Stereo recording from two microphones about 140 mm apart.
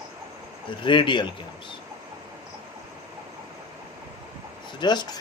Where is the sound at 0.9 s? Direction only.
35° left (ahead or behind).